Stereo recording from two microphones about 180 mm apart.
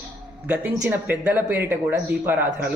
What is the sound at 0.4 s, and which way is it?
Speech, 5° right (ahead or behind).